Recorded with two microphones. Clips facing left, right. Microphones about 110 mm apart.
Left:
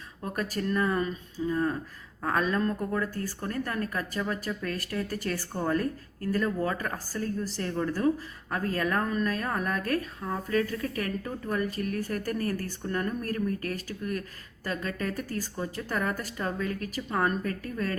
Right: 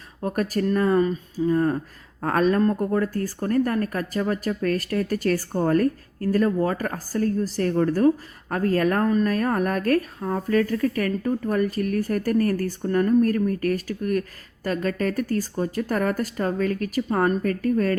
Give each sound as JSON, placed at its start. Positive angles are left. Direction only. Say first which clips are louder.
{"t": 0.8, "sound": "speech", "louder": "right 8 dB", "side_deg": -40}
{"t": 2.2, "sound": "speech", "louder": "right 7 dB", "side_deg": -60}
{"t": 2.6, "sound": "speech", "louder": "right 7 dB", "side_deg": -40}
{"t": 3.2, "sound": "speech", "louder": "right 10 dB", "side_deg": -50}
{"t": 6.2, "sound": "speech", "louder": "right 7 dB", "side_deg": -45}
{"t": 8.4, "sound": "speech", "louder": "right 8 dB", "side_deg": -55}
{"t": 9.3, "sound": "speech", "louder": "right 7 dB", "side_deg": -60}
{"t": 10.2, "sound": "speech", "louder": "right 5 dB", "side_deg": -45}
{"t": 17.1, "sound": "speech", "louder": "right 5 dB", "side_deg": -45}